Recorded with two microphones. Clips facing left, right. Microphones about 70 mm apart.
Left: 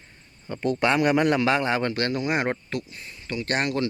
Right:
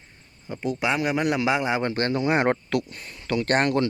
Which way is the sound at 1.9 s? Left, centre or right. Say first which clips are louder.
Right 2 dB; right.